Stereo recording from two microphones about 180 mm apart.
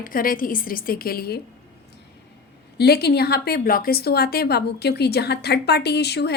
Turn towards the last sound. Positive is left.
turn(degrees=65)  # may be behind; listen again after turning